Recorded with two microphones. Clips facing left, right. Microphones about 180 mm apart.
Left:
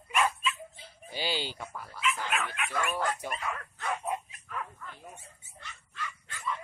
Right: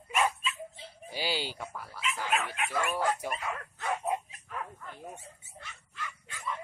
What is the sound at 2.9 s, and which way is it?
Speech, 10° right (ahead or behind).